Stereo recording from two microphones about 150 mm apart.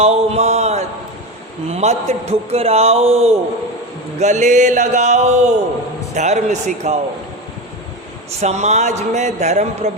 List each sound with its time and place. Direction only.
0.0 s a sound: 40° right (ahead or behind)
1.6 s a man's voice: 45° right (ahead or behind)
8.4 s a man's voice: 50° right (ahead or behind)